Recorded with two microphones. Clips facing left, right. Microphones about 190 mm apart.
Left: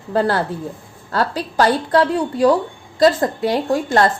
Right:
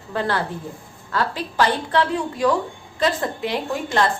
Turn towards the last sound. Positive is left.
turn(degrees=40)  # may be behind; listen again after turning